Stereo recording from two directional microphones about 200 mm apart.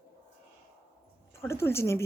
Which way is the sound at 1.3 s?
15° left (ahead or behind).